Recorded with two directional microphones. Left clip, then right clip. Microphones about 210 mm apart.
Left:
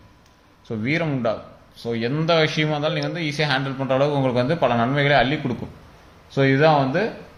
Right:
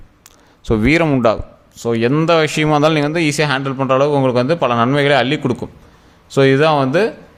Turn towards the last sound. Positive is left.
turn(degrees=-50)  # may be behind; listen again after turning